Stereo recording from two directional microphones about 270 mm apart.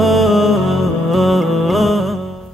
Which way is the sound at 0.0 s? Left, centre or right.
Centre.